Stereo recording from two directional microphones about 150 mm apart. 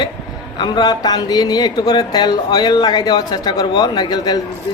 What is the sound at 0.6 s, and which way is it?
Speech, 30° left (ahead or behind).